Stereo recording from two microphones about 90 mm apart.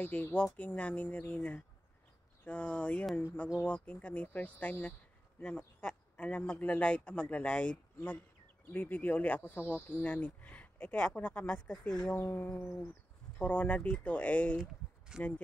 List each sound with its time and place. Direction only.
0.0 s a man's voice: 20° left (ahead or behind)
14.6 s speech: 5° right (ahead or behind)